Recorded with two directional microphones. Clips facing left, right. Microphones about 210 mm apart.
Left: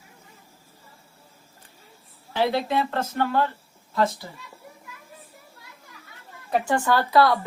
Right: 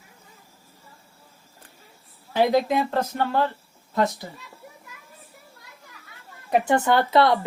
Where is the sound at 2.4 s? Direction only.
15° right (ahead or behind).